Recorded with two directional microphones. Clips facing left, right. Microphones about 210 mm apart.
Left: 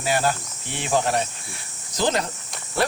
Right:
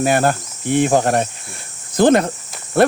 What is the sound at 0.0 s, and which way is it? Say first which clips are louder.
Cricket: right 7 dB; 55° right (ahead or behind).